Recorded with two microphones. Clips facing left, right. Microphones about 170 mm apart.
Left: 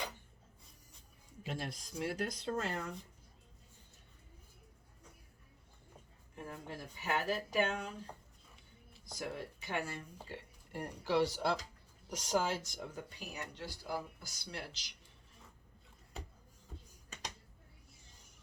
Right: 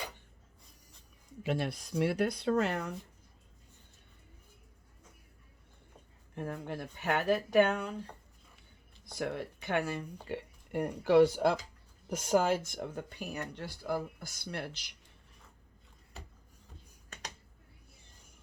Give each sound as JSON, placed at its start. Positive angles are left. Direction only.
{"t": 1.5, "sound": "speech", "side_deg": -70}
{"t": 6.3, "sound": "speech", "side_deg": -60}
{"t": 9.1, "sound": "speech", "side_deg": -65}